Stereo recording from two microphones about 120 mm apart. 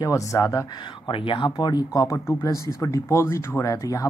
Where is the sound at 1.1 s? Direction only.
45° left (ahead or behind).